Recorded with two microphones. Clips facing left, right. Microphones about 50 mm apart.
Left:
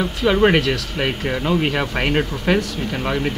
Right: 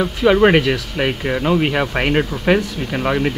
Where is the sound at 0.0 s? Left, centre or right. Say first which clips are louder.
Right 3 dB; centre.